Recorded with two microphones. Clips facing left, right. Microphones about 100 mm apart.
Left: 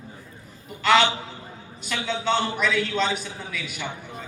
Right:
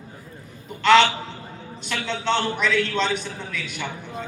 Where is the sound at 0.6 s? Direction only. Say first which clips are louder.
Right 4 dB; 5° left (ahead or behind).